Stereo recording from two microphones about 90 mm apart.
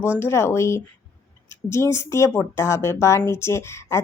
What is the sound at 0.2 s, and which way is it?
Speech, 30° left (ahead or behind).